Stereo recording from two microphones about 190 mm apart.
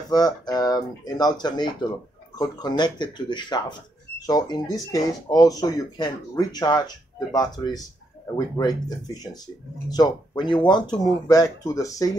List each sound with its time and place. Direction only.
0.1 s speech: 20° left (ahead or behind)